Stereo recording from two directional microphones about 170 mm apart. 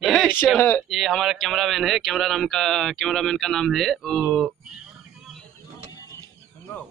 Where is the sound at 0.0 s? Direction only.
5° left (ahead or behind).